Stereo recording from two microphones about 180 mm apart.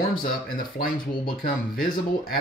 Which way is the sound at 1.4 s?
50° left (ahead or behind).